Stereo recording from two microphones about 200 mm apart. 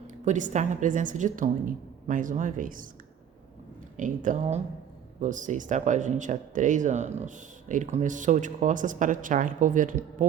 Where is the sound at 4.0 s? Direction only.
40° right (ahead or behind).